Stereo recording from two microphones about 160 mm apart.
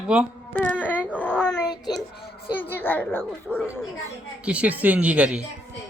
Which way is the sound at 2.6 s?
15° left (ahead or behind).